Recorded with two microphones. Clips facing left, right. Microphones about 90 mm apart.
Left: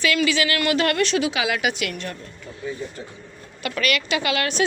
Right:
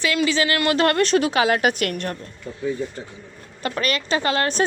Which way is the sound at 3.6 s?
35° right (ahead or behind).